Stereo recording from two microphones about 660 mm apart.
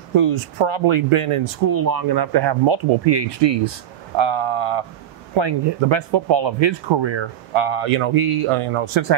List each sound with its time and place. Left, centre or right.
0.1 s speech: right
1.7 s speech: right